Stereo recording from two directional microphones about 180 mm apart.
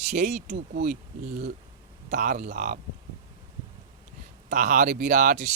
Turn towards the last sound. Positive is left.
turn(degrees=-45)  # may be behind; listen again after turning